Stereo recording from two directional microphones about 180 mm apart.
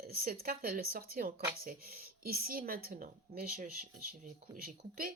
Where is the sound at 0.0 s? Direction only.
55° right (ahead or behind).